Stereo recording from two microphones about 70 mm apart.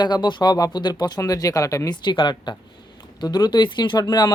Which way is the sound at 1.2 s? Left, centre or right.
Left.